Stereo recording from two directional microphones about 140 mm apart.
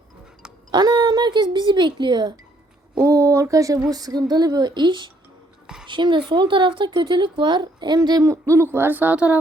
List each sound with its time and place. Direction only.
0.7 s speech: 30° right (ahead or behind); by 9.4 s 10° right (ahead or behind)